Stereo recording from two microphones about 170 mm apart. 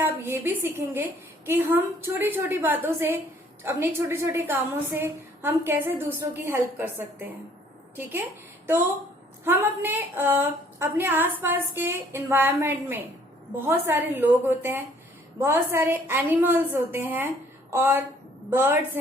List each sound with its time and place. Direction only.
0.0 s a woman's voice: 15° right (ahead or behind)
9.4 s a woman's voice: 10° right (ahead or behind)